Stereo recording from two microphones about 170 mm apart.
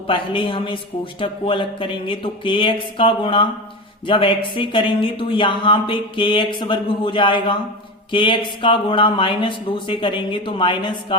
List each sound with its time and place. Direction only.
0.1 s speech: 30° left (ahead or behind)